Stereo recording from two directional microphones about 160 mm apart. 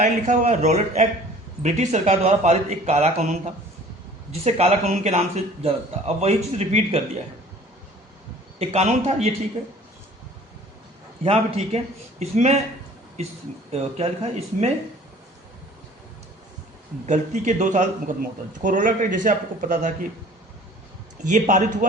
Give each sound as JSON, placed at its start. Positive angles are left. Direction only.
{"t": 0.0, "sound": "speech", "side_deg": -50}
{"t": 4.4, "sound": "speech", "side_deg": -40}
{"t": 8.5, "sound": "speech", "side_deg": -40}
{"t": 11.2, "sound": "speech", "side_deg": -40}
{"t": 17.1, "sound": "speech", "side_deg": -50}
{"t": 21.2, "sound": "speech", "side_deg": -50}